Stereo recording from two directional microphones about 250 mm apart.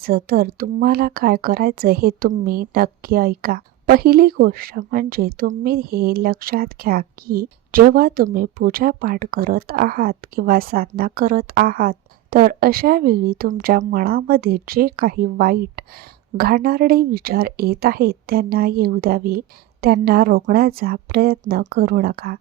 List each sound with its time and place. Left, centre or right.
0.0 s speech: right